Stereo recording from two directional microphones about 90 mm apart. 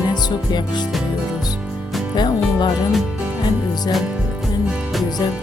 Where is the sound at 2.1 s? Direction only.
55° left (ahead or behind).